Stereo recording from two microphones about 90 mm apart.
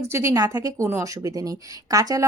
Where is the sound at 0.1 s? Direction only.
30° right (ahead or behind).